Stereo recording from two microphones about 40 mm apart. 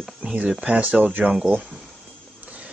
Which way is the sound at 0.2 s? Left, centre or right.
Right.